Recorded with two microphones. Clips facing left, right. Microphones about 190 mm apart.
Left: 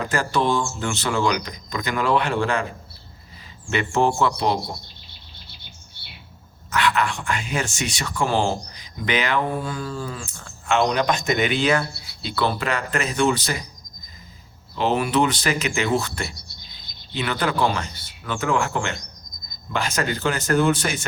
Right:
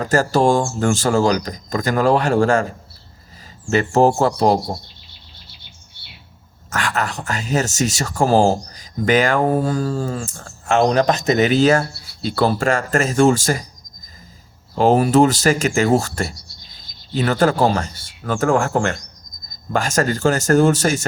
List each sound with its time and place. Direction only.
0.0 s speech: 40° right (ahead or behind)
6.7 s speech: 45° right (ahead or behind)
14.8 s speech: 45° right (ahead or behind)